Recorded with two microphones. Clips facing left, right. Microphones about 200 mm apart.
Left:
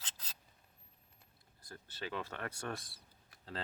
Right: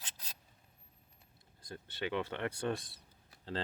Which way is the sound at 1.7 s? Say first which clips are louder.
Right 6 dB; 20° right (ahead or behind).